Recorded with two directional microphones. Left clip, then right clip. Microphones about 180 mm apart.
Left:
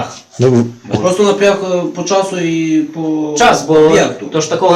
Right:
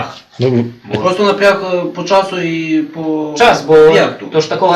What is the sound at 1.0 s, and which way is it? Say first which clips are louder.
A man's voice: even; 10° left (ahead or behind).